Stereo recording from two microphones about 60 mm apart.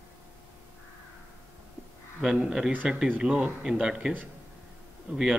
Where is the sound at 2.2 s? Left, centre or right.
Centre.